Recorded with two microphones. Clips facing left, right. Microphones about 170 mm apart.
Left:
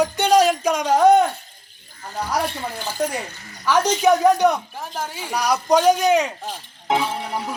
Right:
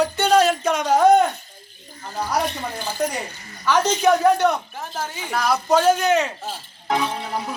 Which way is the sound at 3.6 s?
10° left (ahead or behind).